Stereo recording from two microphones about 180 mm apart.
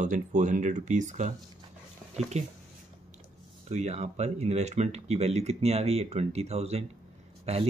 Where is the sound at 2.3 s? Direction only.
35° right (ahead or behind).